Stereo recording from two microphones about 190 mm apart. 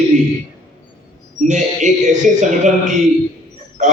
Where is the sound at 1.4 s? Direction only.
40° right (ahead or behind).